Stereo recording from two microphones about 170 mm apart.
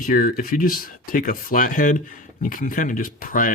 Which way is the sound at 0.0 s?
55° left (ahead or behind).